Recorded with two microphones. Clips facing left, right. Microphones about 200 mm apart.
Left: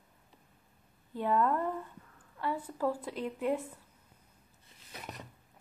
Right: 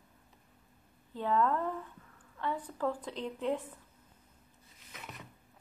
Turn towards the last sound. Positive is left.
turn(degrees=35)  # may be behind; listen again after turning